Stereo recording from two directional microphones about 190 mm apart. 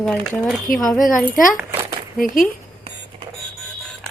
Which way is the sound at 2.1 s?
45° left (ahead or behind).